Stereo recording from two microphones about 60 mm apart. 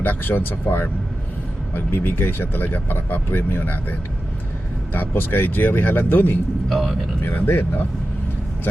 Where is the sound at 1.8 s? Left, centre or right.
Left.